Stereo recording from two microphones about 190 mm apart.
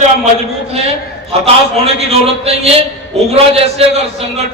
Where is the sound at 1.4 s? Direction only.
30° right (ahead or behind).